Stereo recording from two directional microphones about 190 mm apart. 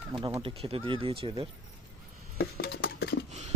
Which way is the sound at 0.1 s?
25° right (ahead or behind).